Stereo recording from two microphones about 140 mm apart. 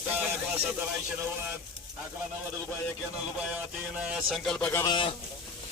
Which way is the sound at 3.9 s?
5° right (ahead or behind).